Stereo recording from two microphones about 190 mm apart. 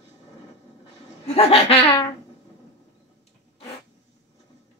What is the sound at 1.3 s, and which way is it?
Laughter, 30° left (ahead or behind).